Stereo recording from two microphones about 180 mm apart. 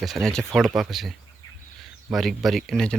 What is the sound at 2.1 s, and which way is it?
Speech, centre (ahead or behind).